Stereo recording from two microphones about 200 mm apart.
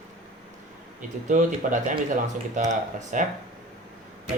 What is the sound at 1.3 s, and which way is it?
Speech, 40° right (ahead or behind).